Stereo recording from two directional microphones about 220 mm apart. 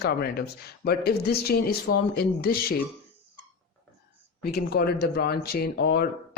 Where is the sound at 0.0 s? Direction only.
45° left (ahead or behind).